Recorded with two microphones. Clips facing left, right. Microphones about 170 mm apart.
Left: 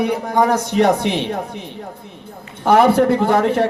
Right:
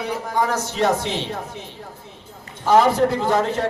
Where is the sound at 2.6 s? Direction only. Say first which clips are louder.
Left 3 dB; 60° left (ahead or behind).